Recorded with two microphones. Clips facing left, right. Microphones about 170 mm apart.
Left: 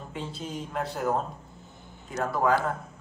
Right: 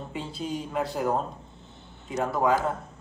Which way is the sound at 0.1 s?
Centre (ahead or behind).